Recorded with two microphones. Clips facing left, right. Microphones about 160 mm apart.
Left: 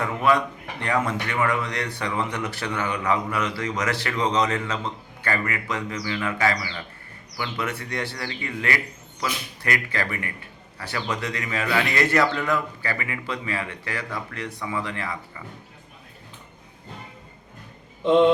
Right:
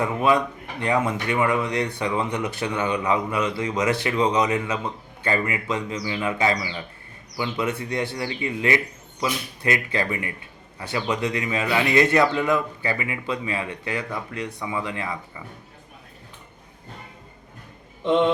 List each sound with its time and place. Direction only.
0.0 s a man's voice: 20° right (ahead or behind)